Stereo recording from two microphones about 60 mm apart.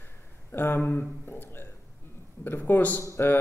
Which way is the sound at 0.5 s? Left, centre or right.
Left.